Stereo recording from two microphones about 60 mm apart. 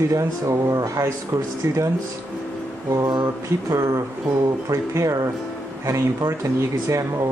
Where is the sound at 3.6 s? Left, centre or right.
Right.